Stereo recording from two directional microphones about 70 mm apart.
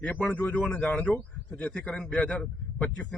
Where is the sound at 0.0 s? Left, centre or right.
Left.